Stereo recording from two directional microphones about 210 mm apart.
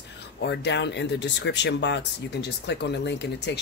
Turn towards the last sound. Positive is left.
turn(degrees=55)  # may be behind; listen again after turning